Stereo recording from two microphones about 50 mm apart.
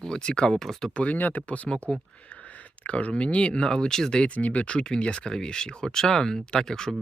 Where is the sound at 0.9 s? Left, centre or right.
Left; by 4.3 s centre.